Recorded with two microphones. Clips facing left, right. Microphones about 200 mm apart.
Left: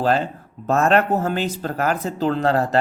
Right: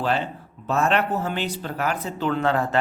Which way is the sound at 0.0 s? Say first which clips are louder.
Left 5 dB; 40° left (ahead or behind).